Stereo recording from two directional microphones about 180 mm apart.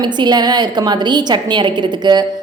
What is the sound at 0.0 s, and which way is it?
A woman's voice, 25° right (ahead or behind).